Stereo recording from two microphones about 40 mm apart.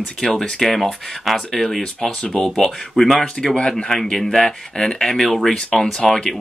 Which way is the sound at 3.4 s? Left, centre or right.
Centre.